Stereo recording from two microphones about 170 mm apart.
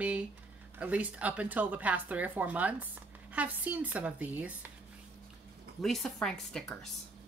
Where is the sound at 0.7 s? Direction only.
5° right (ahead or behind).